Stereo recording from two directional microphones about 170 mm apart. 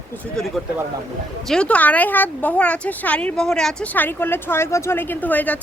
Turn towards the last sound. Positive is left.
turn(degrees=10)  # may be behind; listen again after turning